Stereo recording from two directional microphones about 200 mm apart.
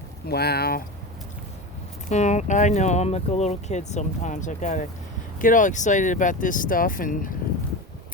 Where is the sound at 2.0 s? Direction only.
35° left (ahead or behind).